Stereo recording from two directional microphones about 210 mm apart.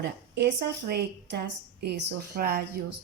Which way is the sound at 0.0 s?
50° right (ahead or behind).